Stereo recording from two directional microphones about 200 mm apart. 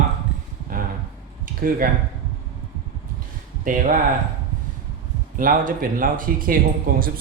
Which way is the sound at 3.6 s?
40° right (ahead or behind).